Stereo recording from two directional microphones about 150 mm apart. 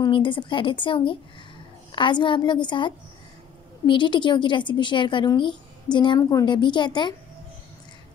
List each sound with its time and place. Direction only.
0.0 s a woman's voice: 35° left (ahead or behind)